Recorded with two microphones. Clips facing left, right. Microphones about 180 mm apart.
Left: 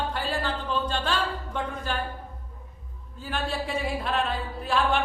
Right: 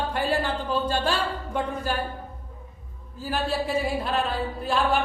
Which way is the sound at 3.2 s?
Centre (ahead or behind).